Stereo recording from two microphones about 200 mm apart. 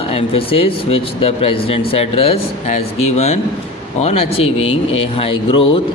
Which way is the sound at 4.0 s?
30° left (ahead or behind).